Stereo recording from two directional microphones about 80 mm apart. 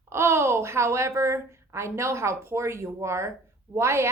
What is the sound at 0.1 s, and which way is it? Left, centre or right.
A woman's voice, right.